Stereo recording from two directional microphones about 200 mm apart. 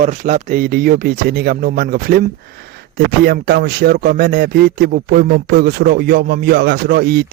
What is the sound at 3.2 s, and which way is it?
Speech, 50° right (ahead or behind).